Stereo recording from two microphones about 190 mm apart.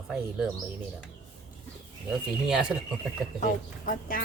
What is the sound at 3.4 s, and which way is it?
Speech, 45° left (ahead or behind).